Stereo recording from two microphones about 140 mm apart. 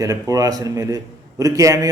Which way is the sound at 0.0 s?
25° right (ahead or behind).